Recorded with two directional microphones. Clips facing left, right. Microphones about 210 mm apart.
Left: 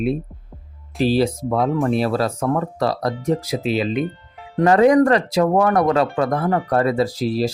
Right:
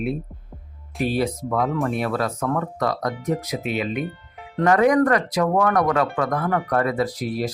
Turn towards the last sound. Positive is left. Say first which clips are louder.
# left 4 dB
turn(degrees=25)  # may be behind; listen again after turning